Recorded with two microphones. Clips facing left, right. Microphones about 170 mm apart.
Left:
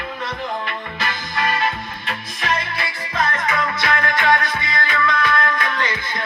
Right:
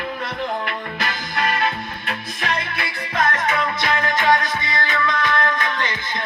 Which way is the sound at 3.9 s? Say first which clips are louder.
Even; 15° right (ahead or behind).